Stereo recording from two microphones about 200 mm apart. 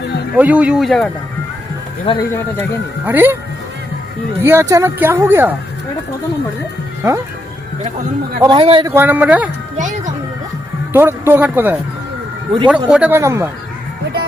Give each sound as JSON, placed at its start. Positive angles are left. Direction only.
{"t": 0.3, "sound": "speech", "side_deg": -5}
{"t": 2.1, "sound": "speech", "side_deg": 25}
{"t": 3.1, "sound": "speech", "side_deg": -10}
{"t": 4.4, "sound": "speech", "side_deg": -10}
{"t": 8.4, "sound": "a man's voice", "side_deg": -25}
{"t": 8.9, "sound": "speech", "side_deg": -10}
{"t": 10.9, "sound": "speech", "side_deg": -10}